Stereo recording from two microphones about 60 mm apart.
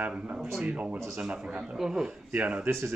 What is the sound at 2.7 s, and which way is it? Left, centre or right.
Speech, right.